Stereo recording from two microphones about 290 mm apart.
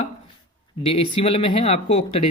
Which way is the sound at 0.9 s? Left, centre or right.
Centre.